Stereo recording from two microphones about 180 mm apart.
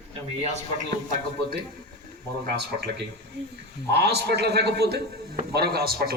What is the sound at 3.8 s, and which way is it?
A man's voice, 65° right (ahead or behind).